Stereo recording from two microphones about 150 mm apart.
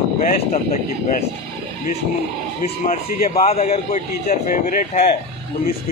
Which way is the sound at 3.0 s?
80° left.